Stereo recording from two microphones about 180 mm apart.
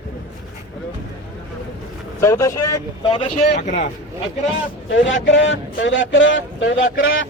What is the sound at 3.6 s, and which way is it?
Speech, 45° left (ahead or behind).